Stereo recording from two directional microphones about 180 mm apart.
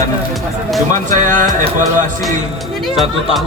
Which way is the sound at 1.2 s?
45° right (ahead or behind).